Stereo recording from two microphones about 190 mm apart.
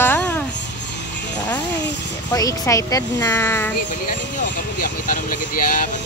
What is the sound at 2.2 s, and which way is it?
A woman's voice, 20° left (ahead or behind).